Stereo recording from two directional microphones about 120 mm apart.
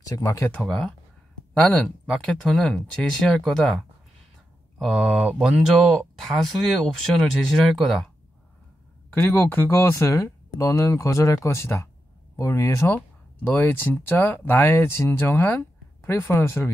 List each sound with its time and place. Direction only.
0.2 s speech: 25° left (ahead or behind)
0.6 s speech: 5° left (ahead or behind)
2.1 s speech: centre (ahead or behind)
9.1 s speech: 15° left (ahead or behind)